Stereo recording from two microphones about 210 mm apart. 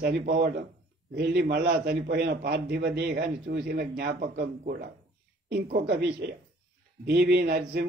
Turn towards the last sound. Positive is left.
turn(degrees=-50)  # may be behind; listen again after turning